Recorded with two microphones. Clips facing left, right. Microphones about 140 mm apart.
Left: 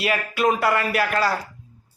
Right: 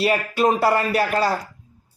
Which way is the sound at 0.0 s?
30° right (ahead or behind).